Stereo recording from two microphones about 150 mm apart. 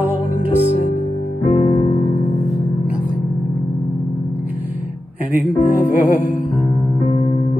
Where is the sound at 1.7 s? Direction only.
35° left (ahead or behind).